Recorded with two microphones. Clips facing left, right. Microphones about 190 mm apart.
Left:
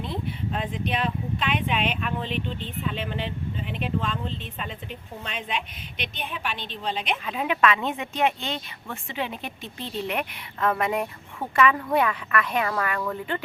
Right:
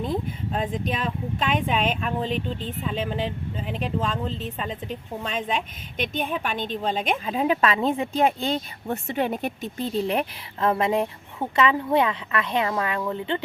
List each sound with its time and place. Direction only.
0.0 s speech: 40° right (ahead or behind)
7.3 s speech: 35° right (ahead or behind)